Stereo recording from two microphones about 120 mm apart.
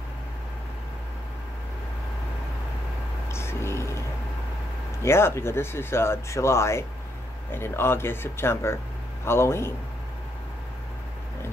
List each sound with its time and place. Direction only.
3.3 s vehicle: 20° left (ahead or behind)
5.0 s speech: 20° left (ahead or behind)